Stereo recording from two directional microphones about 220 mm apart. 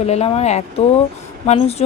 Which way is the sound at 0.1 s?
30° left (ahead or behind).